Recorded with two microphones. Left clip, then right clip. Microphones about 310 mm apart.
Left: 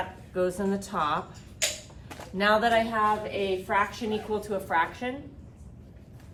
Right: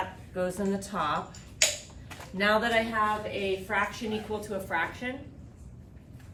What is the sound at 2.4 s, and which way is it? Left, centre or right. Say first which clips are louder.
A woman's voice: left 3 dB; centre.